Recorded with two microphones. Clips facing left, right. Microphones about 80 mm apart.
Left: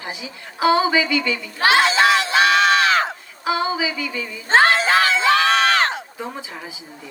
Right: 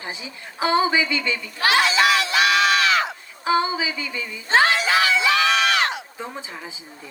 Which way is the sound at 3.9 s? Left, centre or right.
Right.